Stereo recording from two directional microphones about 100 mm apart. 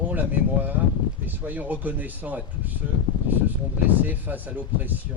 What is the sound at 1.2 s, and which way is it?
Speech, 15° right (ahead or behind).